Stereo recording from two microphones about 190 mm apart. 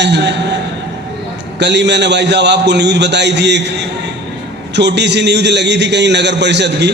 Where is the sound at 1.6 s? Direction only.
65° right (ahead or behind).